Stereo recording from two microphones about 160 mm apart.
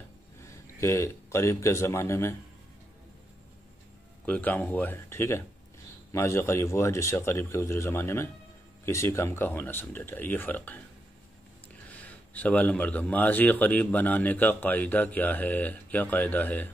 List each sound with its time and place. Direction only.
0.4 s speech: 15° left (ahead or behind)
4.3 s speech: 10° left (ahead or behind)
12.0 s speech: 10° left (ahead or behind)